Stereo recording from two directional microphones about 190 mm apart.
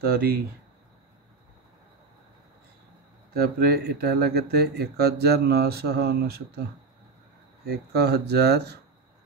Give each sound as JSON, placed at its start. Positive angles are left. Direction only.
{"t": 0.0, "sound": "speech", "side_deg": -55}
{"t": 3.3, "sound": "speech", "side_deg": -55}
{"t": 7.6, "sound": "speech", "side_deg": -55}